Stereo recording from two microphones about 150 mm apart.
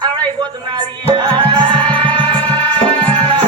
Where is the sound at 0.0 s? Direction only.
30° right (ahead or behind).